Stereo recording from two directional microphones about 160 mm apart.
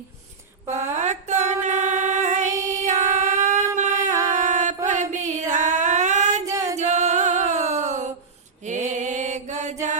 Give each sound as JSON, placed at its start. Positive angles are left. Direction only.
{"t": 0.9, "sound": "a sound", "side_deg": -50}
{"t": 1.6, "sound": "music", "side_deg": -50}
{"t": 4.9, "sound": "a sound", "side_deg": -50}
{"t": 6.4, "sound": "singing", "side_deg": -20}
{"t": 6.7, "sound": "music", "side_deg": -45}
{"t": 8.6, "sound": "mantra", "side_deg": -50}